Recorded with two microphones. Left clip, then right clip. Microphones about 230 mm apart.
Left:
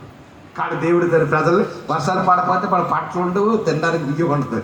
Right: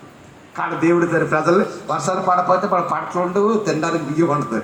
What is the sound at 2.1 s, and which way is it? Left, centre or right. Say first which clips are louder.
A man's voice: even; right.